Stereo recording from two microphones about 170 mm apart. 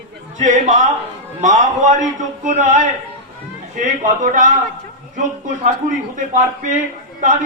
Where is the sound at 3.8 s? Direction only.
50° right (ahead or behind).